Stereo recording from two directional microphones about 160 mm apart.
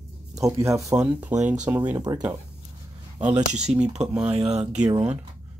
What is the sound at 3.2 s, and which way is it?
Speech, 50° right (ahead or behind).